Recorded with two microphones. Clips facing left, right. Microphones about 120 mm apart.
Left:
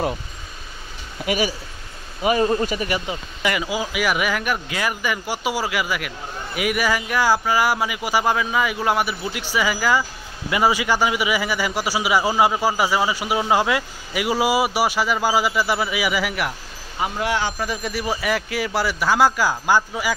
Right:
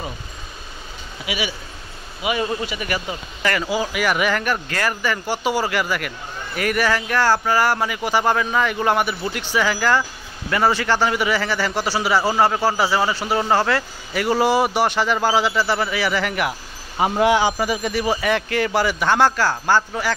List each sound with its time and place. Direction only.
1.2 s a man's voice: 45° left (ahead or behind)
2.9 s speech: 15° left (ahead or behind)
17.0 s speech: 30° right (ahead or behind)
17.3 s speech: 15° right (ahead or behind)
17.8 s a man's voice: centre (ahead or behind)